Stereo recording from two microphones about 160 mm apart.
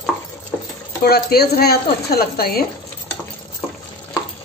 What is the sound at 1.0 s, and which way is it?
Speech, 80° left.